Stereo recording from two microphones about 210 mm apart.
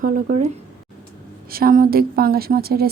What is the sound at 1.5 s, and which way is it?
A woman's voice, 45° right (ahead or behind).